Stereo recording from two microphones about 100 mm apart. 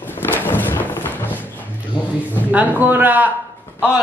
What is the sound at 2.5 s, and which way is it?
Speech, 15° right (ahead or behind).